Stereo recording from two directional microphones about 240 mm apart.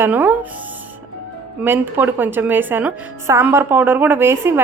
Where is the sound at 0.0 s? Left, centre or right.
Centre.